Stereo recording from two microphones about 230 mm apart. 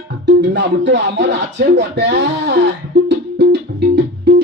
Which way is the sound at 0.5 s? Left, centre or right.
Right.